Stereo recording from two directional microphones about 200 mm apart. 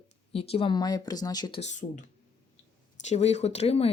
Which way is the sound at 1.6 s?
40° left (ahead or behind).